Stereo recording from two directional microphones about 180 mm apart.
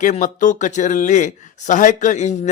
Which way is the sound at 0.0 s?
45° left (ahead or behind).